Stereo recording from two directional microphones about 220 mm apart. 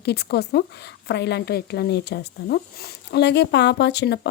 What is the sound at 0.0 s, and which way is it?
A woman's voice, 45° left (ahead or behind).